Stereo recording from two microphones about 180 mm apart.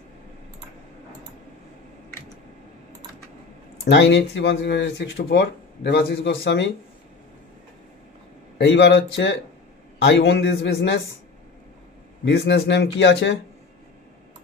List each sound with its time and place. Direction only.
3.8 s speech: 75° left (ahead or behind)
8.5 s speech: 70° left (ahead or behind)
12.3 s speech: 65° left (ahead or behind)